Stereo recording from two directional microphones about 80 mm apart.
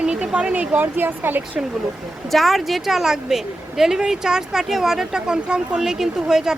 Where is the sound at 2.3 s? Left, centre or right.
Centre.